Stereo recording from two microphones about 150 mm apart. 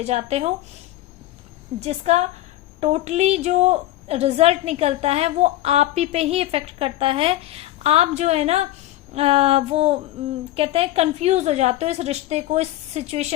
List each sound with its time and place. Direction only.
0.0 s a woman's voice: 45° right (ahead or behind)
1.8 s a woman's voice: 45° right (ahead or behind)
9.1 s female singing: 40° right (ahead or behind)
10.5 s a woman's voice: 40° right (ahead or behind)